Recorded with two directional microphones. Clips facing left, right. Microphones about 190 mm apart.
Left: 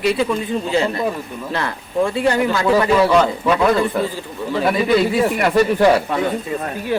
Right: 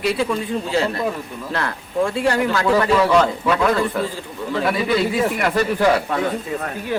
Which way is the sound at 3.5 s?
15° left (ahead or behind).